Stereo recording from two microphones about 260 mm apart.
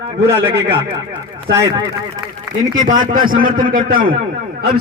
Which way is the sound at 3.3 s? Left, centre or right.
Right.